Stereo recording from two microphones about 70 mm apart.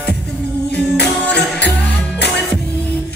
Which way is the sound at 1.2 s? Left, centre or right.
Centre.